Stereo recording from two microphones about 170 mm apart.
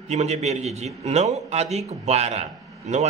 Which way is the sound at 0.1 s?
40° right (ahead or behind).